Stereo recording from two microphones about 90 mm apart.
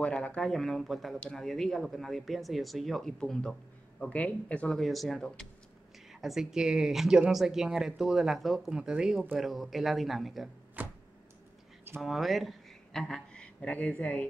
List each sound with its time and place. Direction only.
0.0 s speech: 15° left (ahead or behind)
0.5 s speech: centre (ahead or behind)
4.7 s speech: centre (ahead or behind)
10.8 s a sound: 15° right (ahead or behind)
12.0 s speech: centre (ahead or behind); by 14.2 s 15° left (ahead or behind)